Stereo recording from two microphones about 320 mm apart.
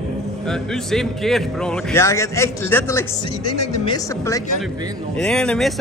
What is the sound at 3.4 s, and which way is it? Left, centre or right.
Speech, left.